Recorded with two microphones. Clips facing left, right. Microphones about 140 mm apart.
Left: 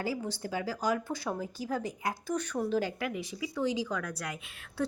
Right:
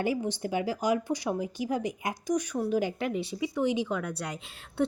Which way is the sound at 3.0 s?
25° right (ahead or behind).